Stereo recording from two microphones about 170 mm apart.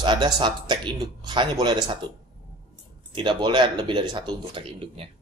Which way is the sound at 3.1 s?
30° right (ahead or behind).